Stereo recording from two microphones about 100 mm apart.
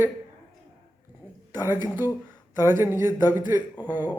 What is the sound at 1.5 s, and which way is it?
Speech, 20° right (ahead or behind).